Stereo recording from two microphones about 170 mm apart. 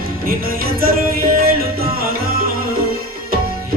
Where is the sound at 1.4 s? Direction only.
60° right (ahead or behind).